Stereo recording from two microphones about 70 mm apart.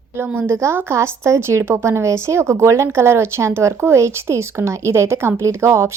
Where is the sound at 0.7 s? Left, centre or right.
Right.